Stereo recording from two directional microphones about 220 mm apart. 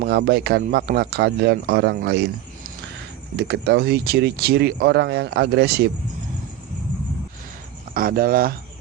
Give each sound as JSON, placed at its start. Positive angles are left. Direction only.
{"t": 0.0, "sound": "speech", "side_deg": -45}
{"t": 3.3, "sound": "speech", "side_deg": -50}
{"t": 7.9, "sound": "speech", "side_deg": -40}